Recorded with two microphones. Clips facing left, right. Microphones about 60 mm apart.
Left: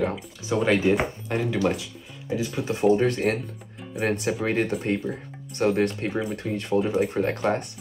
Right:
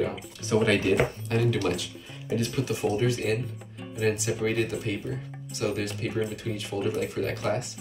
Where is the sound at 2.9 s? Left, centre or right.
Left.